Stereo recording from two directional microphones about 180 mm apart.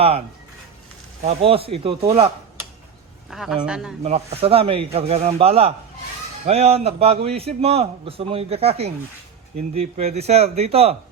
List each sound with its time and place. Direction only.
1.2 s a man's voice: 35° right (ahead or behind)
3.2 s speech: centre (ahead or behind)
4.0 s a man's voice: 35° right (ahead or behind)